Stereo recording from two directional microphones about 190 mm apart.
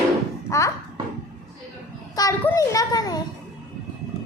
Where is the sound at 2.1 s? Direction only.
15° left (ahead or behind).